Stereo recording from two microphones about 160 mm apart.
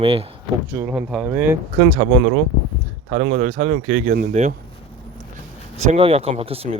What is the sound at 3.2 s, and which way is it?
Speech, 50° right (ahead or behind).